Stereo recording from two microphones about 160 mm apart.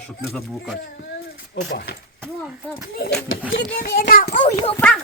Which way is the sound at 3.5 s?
70° left (ahead or behind).